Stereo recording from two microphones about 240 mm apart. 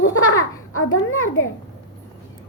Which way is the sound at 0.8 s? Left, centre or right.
Left.